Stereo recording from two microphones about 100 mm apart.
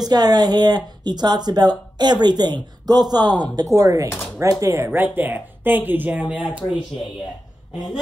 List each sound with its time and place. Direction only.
0.0 s speech: 40° right (ahead or behind)
3.6 s speech: 35° right (ahead or behind); by 6.6 s 15° right (ahead or behind)